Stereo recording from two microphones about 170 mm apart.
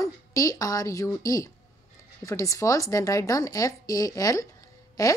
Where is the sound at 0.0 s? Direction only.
20° left (ahead or behind).